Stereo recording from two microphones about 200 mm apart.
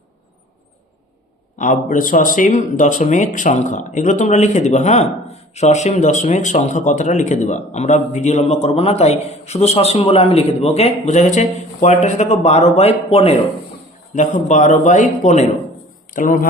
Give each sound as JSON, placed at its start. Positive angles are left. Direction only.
{"t": 1.5, "sound": "speech", "side_deg": 40}